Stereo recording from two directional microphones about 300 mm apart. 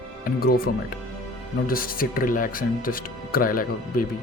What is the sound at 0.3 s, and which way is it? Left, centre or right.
Speech, left.